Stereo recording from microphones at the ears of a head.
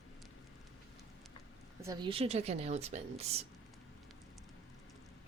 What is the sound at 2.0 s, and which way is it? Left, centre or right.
A woman's voice, right.